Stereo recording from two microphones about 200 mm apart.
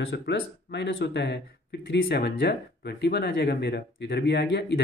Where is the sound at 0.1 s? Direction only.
60° left (ahead or behind).